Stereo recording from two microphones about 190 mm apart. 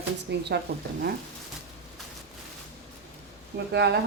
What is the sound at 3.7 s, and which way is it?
Speech, 60° right (ahead or behind).